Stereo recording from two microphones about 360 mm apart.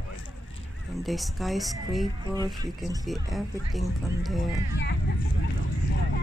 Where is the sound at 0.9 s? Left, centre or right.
Centre.